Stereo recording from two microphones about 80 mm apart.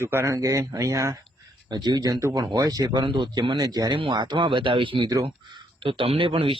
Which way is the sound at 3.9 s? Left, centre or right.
Right.